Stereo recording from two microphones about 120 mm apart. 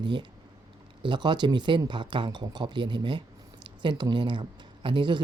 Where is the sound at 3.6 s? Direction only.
40° right (ahead or behind).